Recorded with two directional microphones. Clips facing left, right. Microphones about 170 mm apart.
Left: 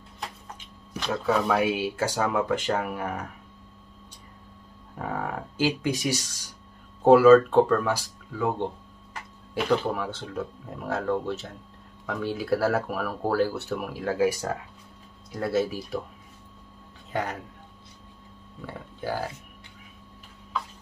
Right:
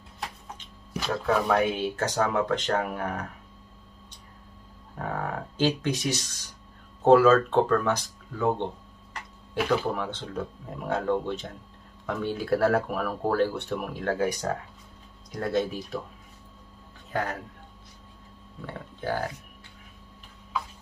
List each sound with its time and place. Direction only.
1.2 s speech: 5° left (ahead or behind)
4.9 s speech: 10° left (ahead or behind)
17.1 s speech: 20° left (ahead or behind)
18.7 s speech: 10° left (ahead or behind)